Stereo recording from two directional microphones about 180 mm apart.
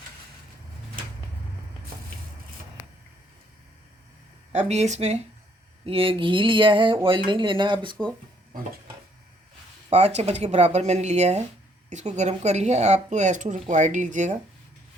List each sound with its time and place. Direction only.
4.5 s speech: 40° right (ahead or behind)
9.9 s speech: 35° right (ahead or behind)